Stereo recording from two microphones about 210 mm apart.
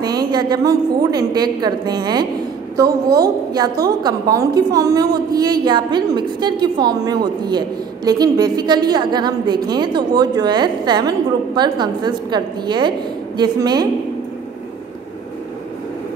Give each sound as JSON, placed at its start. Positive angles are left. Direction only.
{"t": 0.0, "sound": "a woman's voice", "side_deg": -20}
{"t": 3.5, "sound": "a woman's voice", "side_deg": -15}